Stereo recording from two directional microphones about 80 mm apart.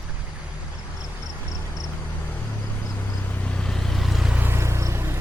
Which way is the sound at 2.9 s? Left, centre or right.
Left.